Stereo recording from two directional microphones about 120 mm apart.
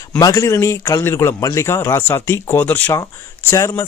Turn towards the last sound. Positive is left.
turn(degrees=25)  # may be behind; listen again after turning